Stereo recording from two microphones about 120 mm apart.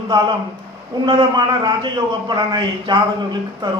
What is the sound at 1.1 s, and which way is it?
A man's voice, 40° right (ahead or behind).